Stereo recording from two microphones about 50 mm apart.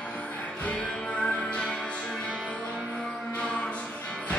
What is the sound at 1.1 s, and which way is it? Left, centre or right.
Music, left.